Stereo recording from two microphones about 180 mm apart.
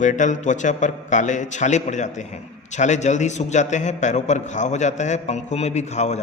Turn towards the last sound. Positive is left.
turn(degrees=40)  # may be behind; listen again after turning